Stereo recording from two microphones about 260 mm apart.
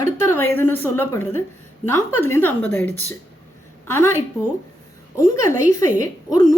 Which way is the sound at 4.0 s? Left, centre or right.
Centre.